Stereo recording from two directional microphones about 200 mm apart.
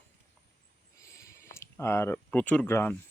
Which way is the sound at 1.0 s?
15° left (ahead or behind).